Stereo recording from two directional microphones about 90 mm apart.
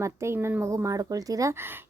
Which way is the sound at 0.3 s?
20° right (ahead or behind).